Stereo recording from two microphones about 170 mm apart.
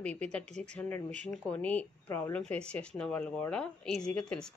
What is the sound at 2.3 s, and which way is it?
Speech, 10° left (ahead or behind).